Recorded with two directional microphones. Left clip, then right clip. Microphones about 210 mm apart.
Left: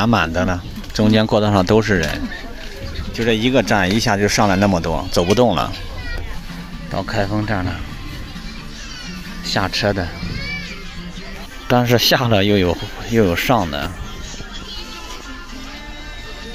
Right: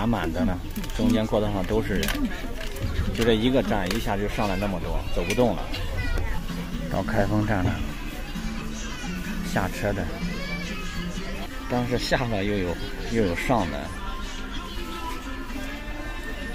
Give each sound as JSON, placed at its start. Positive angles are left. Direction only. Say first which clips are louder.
{"t": 0.0, "sound": "speech", "louder": "left 10 dB", "side_deg": 25}
{"t": 3.3, "sound": "speech", "louder": "left 6 dB", "side_deg": 15}
{"t": 3.7, "sound": "speech", "louder": "left 10 dB", "side_deg": 30}
{"t": 6.9, "sound": "speech", "louder": "left 4 dB", "side_deg": 10}
{"t": 9.5, "sound": "speech", "louder": "left 9 dB", "side_deg": 15}
{"t": 11.7, "sound": "speech", "louder": "left 11 dB", "side_deg": 35}